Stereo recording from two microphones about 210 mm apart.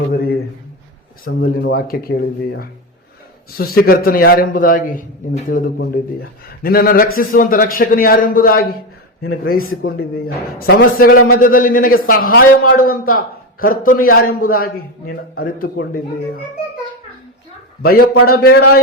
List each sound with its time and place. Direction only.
0.1 s a man's voice: 50° left (ahead or behind)
17.8 s a man's voice: 45° left (ahead or behind)